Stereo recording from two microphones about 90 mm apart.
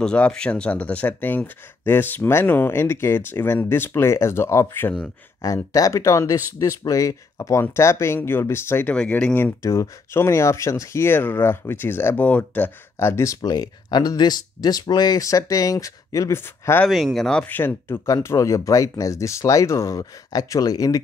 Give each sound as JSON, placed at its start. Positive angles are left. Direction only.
{"t": 0.0, "sound": "speech", "side_deg": 10}
{"t": 5.4, "sound": "speech", "side_deg": 40}
{"t": 8.9, "sound": "speech", "side_deg": 10}
{"t": 9.3, "sound": "speech", "side_deg": 25}
{"t": 16.3, "sound": "speech", "side_deg": 25}
{"t": 16.8, "sound": "speech", "side_deg": 0}
{"t": 17.5, "sound": "speech", "side_deg": 20}
{"t": 18.0, "sound": "speech", "side_deg": 35}